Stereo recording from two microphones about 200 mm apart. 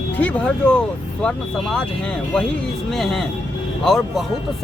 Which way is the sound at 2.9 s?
Centre (ahead or behind).